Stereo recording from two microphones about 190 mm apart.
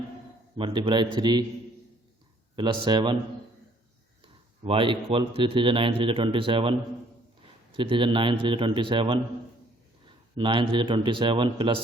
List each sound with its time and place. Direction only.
0.5 s a man's voice: 25° right (ahead or behind)
2.6 s a man's voice: 25° right (ahead or behind)
4.2 s a man's voice: 25° right (ahead or behind)
7.8 s a man's voice: 25° right (ahead or behind)